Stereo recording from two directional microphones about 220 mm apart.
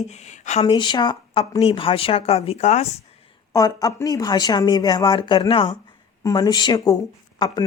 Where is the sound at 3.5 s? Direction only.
15° left (ahead or behind).